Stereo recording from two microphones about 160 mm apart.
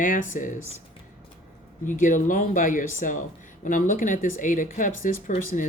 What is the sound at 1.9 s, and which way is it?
Speech, 55° left (ahead or behind).